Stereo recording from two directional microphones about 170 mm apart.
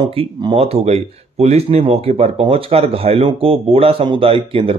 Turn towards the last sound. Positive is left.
turn(degrees=-35)  # may be behind; listen again after turning